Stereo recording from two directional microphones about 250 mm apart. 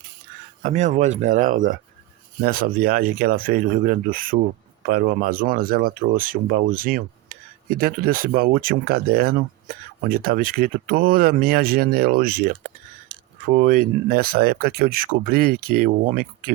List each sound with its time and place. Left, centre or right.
0.6 s speech: right